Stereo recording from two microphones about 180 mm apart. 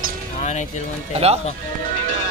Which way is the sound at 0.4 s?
40° left (ahead or behind).